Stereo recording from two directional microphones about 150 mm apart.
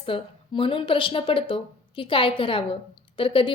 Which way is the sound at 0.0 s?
35° left (ahead or behind).